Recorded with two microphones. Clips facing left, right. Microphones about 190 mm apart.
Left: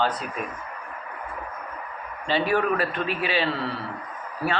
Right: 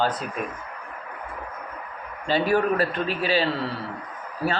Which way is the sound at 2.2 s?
40° right (ahead or behind).